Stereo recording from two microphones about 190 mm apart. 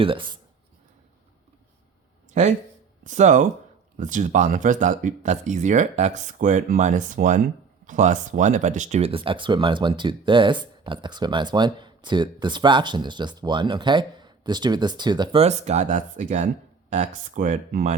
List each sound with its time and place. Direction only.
0.0 s speech: 25° right (ahead or behind)
3.0 s speech: 40° right (ahead or behind)